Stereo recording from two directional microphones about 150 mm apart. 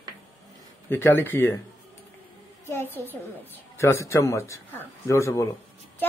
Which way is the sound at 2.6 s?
15° left (ahead or behind).